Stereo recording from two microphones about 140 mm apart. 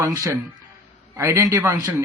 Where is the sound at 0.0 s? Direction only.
20° right (ahead or behind).